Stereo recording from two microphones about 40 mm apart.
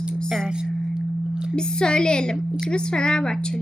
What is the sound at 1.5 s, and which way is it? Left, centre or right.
Speech, left.